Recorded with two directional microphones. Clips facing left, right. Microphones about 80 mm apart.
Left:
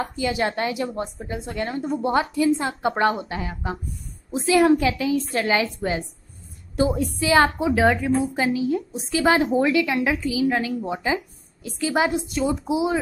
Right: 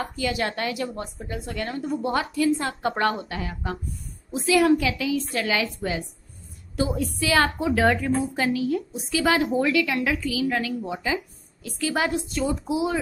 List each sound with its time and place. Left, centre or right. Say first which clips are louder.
0.1 s a woman's voice: left 3 dB; left